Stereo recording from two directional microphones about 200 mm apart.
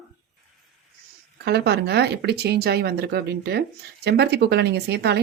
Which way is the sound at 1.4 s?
55° right (ahead or behind).